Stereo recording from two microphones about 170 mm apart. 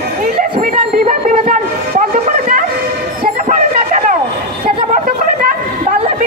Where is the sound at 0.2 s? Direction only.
55° right (ahead or behind).